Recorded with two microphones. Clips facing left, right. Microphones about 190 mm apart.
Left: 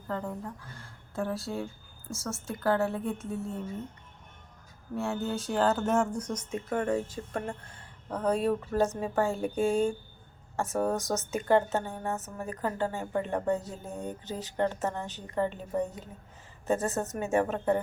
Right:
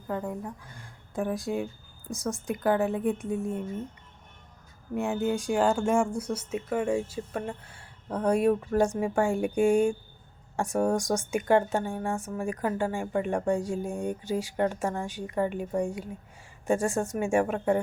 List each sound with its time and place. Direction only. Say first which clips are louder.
0.1 s a woman's voice: right 2 dB; 15° right (ahead or behind)
4.9 s a woman's voice: right 4 dB; 15° right (ahead or behind)